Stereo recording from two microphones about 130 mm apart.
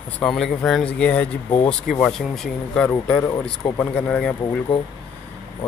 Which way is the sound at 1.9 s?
5° left (ahead or behind).